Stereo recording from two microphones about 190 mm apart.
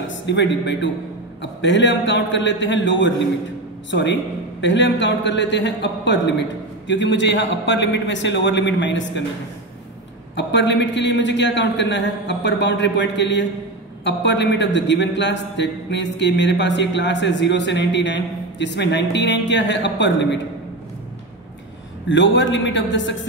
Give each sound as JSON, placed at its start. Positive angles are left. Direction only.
{"t": 0.3, "sound": "a man's voice", "side_deg": 70}
{"t": 10.3, "sound": "a man's voice", "side_deg": 70}
{"t": 22.1, "sound": "a man's voice", "side_deg": 75}